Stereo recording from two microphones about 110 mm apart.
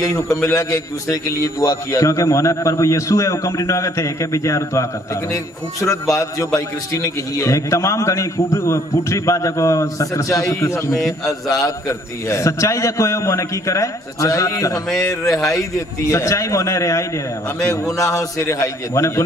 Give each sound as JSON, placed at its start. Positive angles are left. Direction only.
{"t": 0.5, "sound": "a man's voice", "side_deg": 30}
{"t": 10.9, "sound": "a man's voice", "side_deg": 0}
{"t": 11.6, "sound": "a man's voice", "side_deg": 30}
{"t": 15.2, "sound": "a man's voice", "side_deg": 0}
{"t": 16.1, "sound": "a man's voice", "side_deg": 25}